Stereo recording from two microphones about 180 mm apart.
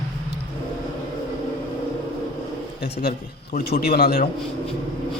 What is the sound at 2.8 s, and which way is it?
Speech, 65° left (ahead or behind).